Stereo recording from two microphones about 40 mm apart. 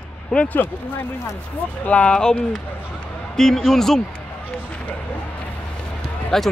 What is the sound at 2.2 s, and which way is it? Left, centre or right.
Speech, centre.